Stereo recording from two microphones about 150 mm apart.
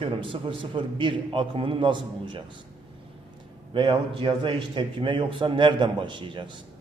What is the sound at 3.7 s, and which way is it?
A man's voice, 35° right (ahead or behind).